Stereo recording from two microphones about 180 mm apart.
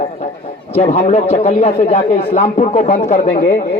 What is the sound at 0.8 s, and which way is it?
Speech, 35° left (ahead or behind).